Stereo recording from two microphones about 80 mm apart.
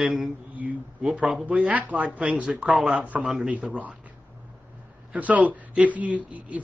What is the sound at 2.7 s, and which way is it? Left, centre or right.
Speech, centre.